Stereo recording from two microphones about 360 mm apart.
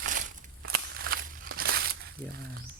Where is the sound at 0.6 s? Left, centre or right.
Right.